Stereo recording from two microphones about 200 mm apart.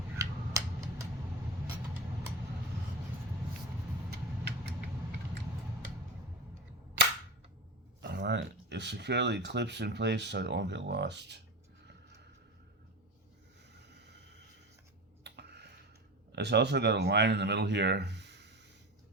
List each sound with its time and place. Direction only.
0.2 s scissors: 15° right (ahead or behind)
8.0 s speech: 60° right (ahead or behind)
11.9 s a sound: 60° right (ahead or behind)
13.7 s vehicle: 60° right (ahead or behind)
15.2 s finger snapping: 60° right (ahead or behind)
16.3 s speech: 55° right (ahead or behind)